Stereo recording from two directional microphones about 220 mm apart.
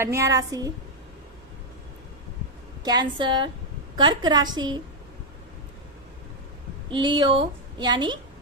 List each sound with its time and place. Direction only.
0.0 s a woman's voice: 15° right (ahead or behind)
2.8 s a woman's voice: 20° right (ahead or behind)
6.9 s a woman's voice: 20° right (ahead or behind)